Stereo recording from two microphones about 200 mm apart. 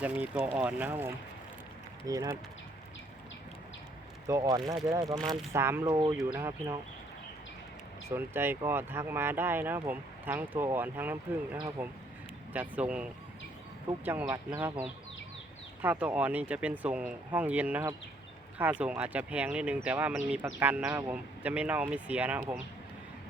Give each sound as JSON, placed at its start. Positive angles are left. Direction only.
{"t": 0.0, "sound": "speech", "side_deg": -5}
{"t": 4.3, "sound": "speech", "side_deg": -15}
{"t": 8.1, "sound": "speech", "side_deg": -10}
{"t": 12.5, "sound": "speech", "side_deg": -5}
{"t": 15.8, "sound": "speech", "side_deg": -10}